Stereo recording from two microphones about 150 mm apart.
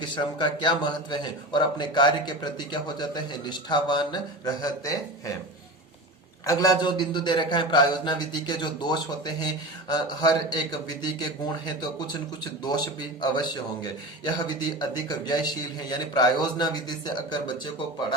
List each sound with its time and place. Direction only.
0.0 s a man's voice: 30° left (ahead or behind)
6.4 s speech: 25° left (ahead or behind)